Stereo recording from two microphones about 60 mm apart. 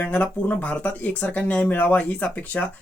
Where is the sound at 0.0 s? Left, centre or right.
Left.